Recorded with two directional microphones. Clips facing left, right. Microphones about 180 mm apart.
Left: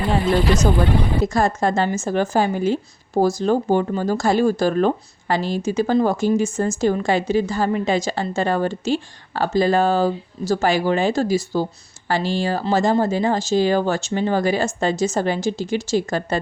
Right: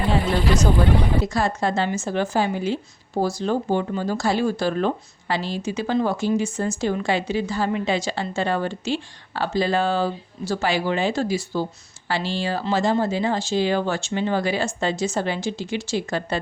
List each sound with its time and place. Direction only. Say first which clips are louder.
1.2 s speech: left 4 dB; 45° left (ahead or behind)